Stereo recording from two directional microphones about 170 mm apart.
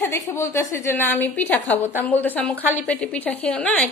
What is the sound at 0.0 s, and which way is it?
A woman's voice, 15° left (ahead or behind).